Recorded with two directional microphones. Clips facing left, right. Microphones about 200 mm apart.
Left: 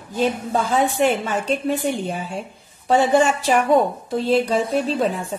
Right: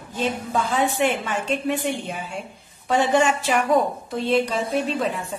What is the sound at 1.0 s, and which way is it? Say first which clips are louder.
A woman's voice: left 3 dB; 40° left (ahead or behind).